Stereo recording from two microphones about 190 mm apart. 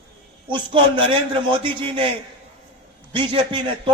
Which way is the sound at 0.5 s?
25° right (ahead or behind).